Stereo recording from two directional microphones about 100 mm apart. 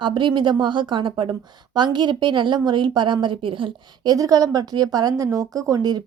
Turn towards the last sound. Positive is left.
turn(degrees=-40)  # may be behind; listen again after turning